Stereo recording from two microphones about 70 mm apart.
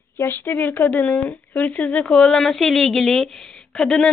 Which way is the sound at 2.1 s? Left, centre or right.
Centre.